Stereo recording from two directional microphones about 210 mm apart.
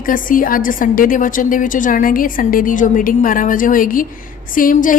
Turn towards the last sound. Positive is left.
turn(degrees=40)  # may be behind; listen again after turning